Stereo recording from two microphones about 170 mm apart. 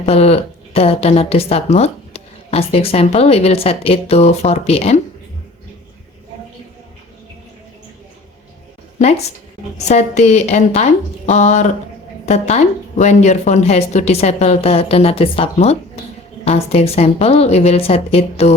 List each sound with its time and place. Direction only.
0.0 s speech: 35° left (ahead or behind)
9.0 s a woman's voice: 40° left (ahead or behind)